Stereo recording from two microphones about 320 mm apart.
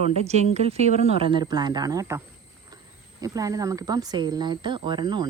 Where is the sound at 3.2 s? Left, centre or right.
Centre.